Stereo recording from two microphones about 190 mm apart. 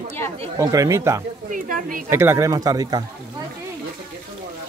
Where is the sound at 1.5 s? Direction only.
45° right (ahead or behind).